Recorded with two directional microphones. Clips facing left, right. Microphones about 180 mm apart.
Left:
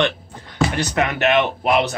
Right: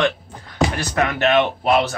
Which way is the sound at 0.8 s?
20° left (ahead or behind).